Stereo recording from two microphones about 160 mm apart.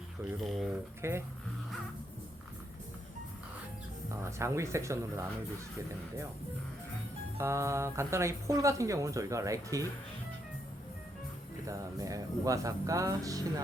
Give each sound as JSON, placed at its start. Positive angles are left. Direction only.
{"t": 0.3, "sound": "speech", "side_deg": 0}
{"t": 1.0, "sound": "speech", "side_deg": -15}
{"t": 4.3, "sound": "speech", "side_deg": -15}
{"t": 7.3, "sound": "speech", "side_deg": -20}
{"t": 11.7, "sound": "speech", "side_deg": -20}